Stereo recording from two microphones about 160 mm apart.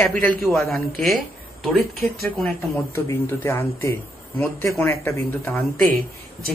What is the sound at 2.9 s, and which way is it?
A woman's voice, 15° left (ahead or behind).